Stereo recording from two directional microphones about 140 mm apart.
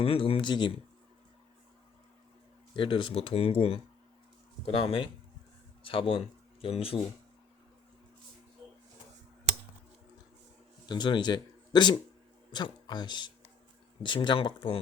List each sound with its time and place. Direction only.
0.0 s speech: 40° left (ahead or behind)
2.7 s speech: 35° left (ahead or behind)
10.8 s speech: 30° left (ahead or behind)